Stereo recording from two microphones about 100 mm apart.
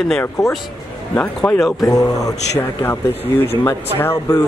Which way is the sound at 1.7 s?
40° left (ahead or behind).